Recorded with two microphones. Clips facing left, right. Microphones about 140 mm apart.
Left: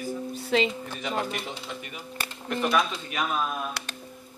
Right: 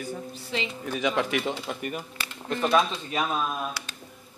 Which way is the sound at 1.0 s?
85° right.